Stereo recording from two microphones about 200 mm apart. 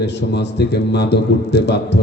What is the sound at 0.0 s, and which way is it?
Speech, 60° left (ahead or behind).